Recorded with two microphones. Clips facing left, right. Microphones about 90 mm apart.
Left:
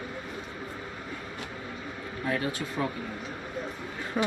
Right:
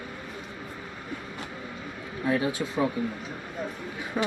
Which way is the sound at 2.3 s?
15° right (ahead or behind).